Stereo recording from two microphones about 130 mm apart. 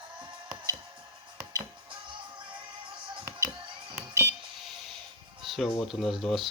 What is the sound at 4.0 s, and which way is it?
Music, 20° right (ahead or behind).